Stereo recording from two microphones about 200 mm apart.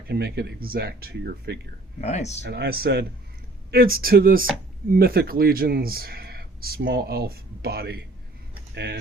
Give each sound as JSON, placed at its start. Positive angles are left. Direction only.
{"t": 0.1, "sound": "speech", "side_deg": -55}
{"t": 2.0, "sound": "speech", "side_deg": 35}
{"t": 2.5, "sound": "speech", "side_deg": -50}